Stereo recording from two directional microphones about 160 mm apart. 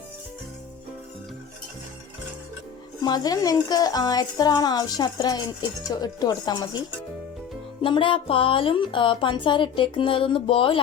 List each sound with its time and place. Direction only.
3.0 s a woman's voice: 25° left (ahead or behind)